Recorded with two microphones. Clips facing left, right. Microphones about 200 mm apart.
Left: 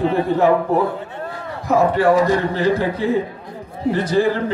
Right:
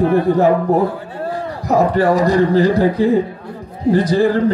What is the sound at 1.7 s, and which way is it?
A man's voice, 40° right (ahead or behind).